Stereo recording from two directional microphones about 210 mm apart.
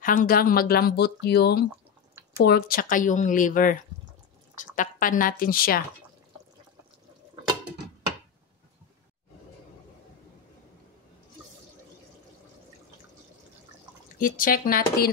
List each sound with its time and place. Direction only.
0.0 s speech: 40° left (ahead or behind)
14.2 s speech: 40° left (ahead or behind)